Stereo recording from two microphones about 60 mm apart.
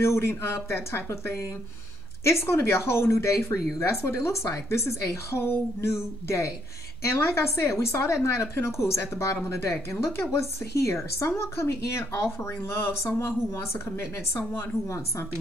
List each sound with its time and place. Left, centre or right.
0.0 s a woman's voice: left